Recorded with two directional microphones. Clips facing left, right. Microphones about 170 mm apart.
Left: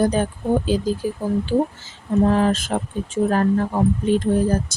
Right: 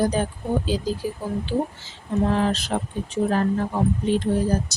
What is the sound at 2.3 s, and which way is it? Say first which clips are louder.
Speech: left 3 dB; 45° left (ahead or behind).